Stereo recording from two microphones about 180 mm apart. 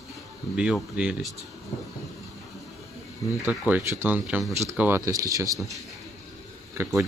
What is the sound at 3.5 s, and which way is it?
Speech, 10° right (ahead or behind).